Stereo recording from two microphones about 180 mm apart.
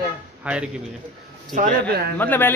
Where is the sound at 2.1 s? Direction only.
10° left (ahead or behind).